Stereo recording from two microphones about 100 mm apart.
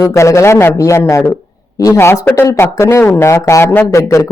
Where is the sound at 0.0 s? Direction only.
30° left (ahead or behind).